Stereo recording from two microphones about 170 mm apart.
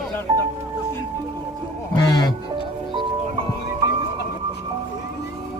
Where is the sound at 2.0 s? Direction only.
25° left (ahead or behind).